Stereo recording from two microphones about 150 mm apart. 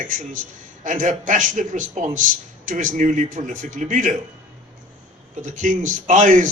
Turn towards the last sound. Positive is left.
turn(degrees=-55)  # may be behind; listen again after turning